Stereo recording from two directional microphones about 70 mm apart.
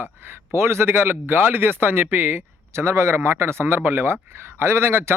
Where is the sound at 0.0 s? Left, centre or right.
Right.